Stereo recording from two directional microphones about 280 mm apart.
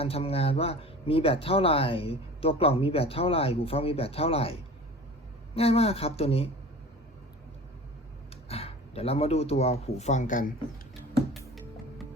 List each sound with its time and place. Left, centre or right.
0.0 s speech: left
8.4 s speech: left